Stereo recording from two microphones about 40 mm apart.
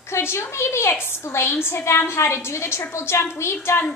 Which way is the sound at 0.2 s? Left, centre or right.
Left.